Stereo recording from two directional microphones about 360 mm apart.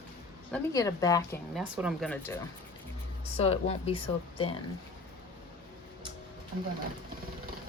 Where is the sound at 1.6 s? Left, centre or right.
Centre.